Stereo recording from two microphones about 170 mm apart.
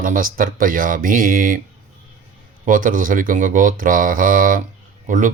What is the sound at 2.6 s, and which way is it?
Speech, 50° right (ahead or behind).